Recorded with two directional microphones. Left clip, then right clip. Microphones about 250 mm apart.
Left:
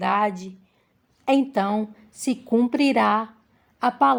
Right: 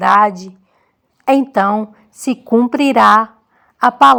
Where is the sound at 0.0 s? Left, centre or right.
Right.